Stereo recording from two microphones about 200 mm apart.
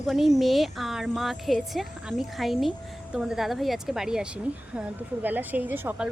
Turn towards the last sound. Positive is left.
turn(degrees=-10)  # may be behind; listen again after turning